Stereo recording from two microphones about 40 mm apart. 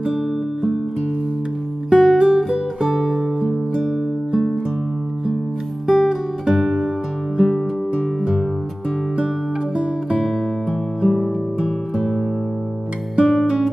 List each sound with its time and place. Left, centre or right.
0.0 s music: centre
1.9 s music: centre
5.9 s music: centre
7.9 s music: centre
9.8 s music: centre
13.2 s music: centre